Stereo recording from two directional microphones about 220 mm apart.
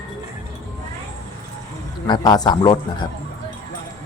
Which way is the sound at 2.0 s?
20° left (ahead or behind).